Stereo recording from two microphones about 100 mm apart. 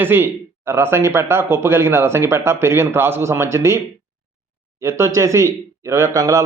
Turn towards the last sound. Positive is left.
turn(degrees=-35)  # may be behind; listen again after turning